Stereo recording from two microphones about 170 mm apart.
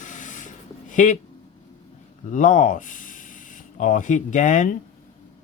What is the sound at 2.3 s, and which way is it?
Speech, 45° left (ahead or behind).